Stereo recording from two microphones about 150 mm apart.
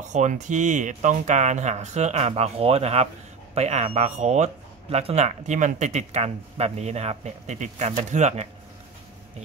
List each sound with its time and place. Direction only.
0.0 s speech: 55° right (ahead or behind)